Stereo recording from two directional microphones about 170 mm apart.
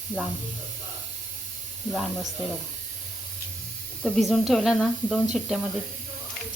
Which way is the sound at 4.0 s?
Centre (ahead or behind).